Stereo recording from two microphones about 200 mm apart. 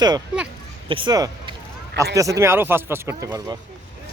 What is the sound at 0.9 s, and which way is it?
Speech, 25° right (ahead or behind).